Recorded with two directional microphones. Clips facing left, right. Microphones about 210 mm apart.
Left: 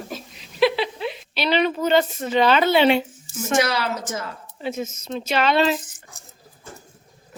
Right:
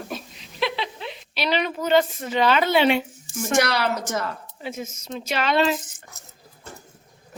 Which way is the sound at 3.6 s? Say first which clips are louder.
Even; 65° right (ahead or behind).